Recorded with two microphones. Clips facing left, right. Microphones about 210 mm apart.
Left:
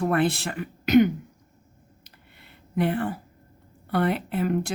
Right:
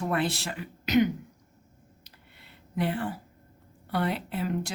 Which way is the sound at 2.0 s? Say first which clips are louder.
Left 2 dB; 55° left (ahead or behind).